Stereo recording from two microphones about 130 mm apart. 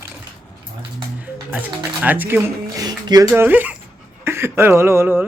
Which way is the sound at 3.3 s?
15° right (ahead or behind).